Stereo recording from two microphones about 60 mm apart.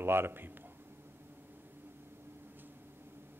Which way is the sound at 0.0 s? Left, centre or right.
Right.